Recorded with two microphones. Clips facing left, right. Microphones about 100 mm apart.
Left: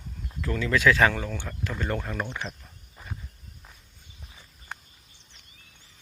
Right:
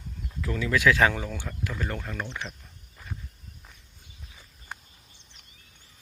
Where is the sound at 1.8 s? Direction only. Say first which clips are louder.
Left 7 dB; 5° left (ahead or behind).